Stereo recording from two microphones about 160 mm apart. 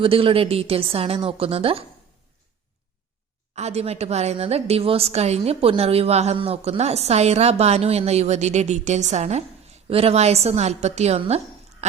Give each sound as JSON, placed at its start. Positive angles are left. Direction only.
{"t": 0.0, "sound": "a woman's voice", "side_deg": -35}
{"t": 3.5, "sound": "a woman's voice", "side_deg": -40}
{"t": 11.8, "sound": "a sound", "side_deg": -45}